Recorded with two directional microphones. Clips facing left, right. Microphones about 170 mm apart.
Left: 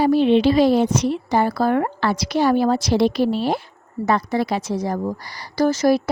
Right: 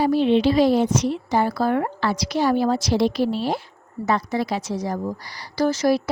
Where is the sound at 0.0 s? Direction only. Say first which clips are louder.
Left 3 dB; 65° left (ahead or behind).